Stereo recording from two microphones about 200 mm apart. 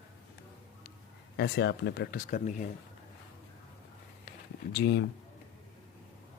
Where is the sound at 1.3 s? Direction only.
55° left (ahead or behind); by 2.7 s 40° left (ahead or behind).